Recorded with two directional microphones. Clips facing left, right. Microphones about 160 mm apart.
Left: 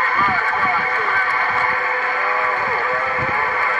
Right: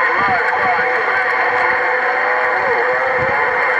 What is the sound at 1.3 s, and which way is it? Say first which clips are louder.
Vehicle: right 5 dB; 50° right (ahead or behind).